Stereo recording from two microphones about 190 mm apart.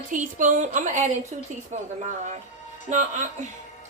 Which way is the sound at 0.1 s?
40° right (ahead or behind).